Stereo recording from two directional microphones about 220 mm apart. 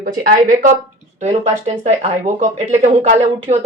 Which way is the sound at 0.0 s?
40° right (ahead or behind).